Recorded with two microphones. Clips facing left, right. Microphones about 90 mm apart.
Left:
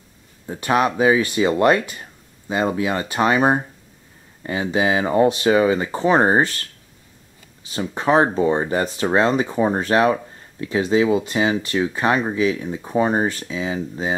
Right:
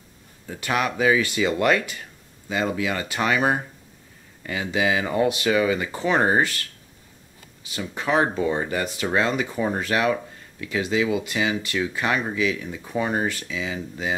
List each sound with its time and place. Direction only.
0.5 s speech: 30° left (ahead or behind)